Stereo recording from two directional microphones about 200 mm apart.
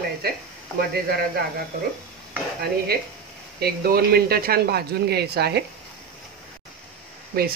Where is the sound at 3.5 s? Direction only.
50° right (ahead or behind).